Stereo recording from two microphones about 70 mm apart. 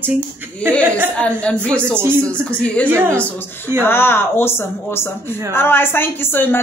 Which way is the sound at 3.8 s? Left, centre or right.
Left.